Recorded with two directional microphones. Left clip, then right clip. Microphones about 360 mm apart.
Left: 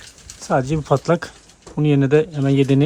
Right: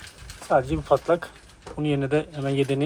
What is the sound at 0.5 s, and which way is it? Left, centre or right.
Speech, left.